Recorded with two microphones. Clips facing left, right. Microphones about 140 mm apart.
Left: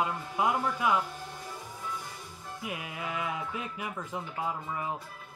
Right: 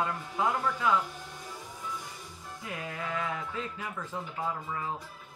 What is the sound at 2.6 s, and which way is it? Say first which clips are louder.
Speech: even; 15° left (ahead or behind).